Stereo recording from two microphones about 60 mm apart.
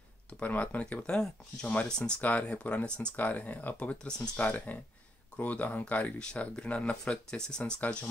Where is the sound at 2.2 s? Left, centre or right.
Left.